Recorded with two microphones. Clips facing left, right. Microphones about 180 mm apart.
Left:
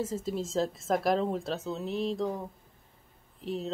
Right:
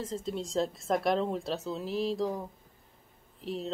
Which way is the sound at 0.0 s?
5° left (ahead or behind).